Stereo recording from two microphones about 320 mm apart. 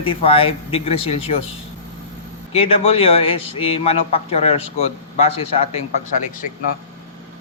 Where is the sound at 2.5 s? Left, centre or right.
Centre.